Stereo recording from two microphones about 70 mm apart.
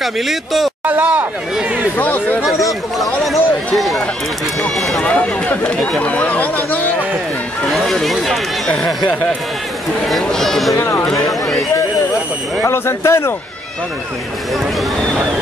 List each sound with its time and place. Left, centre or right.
0.0 s speech: centre
0.8 s speech: right
2.0 s speech: left
3.0 s speech: centre
5.0 s speech: centre
7.6 s speech: centre
10.2 s speech: centre
10.8 s speech: left
11.2 s speech: centre
12.6 s speech: left